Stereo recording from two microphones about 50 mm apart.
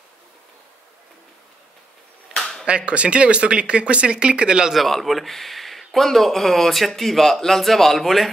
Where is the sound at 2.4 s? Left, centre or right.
Centre.